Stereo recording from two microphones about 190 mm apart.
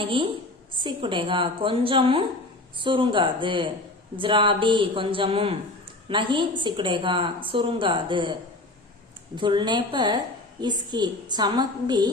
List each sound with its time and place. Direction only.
0.0 s speech: 25° right (ahead or behind)